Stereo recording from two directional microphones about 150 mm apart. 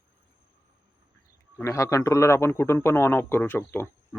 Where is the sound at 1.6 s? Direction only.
20° left (ahead or behind).